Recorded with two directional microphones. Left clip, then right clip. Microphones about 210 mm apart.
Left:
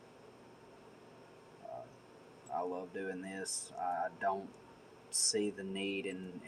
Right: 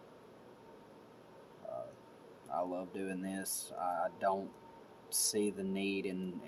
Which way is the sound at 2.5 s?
45° right (ahead or behind).